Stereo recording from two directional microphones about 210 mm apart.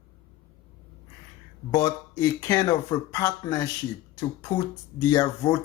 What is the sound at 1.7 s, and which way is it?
Speech, 15° left (ahead or behind).